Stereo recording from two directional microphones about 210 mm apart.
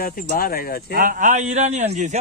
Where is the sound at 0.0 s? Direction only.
45° left (ahead or behind).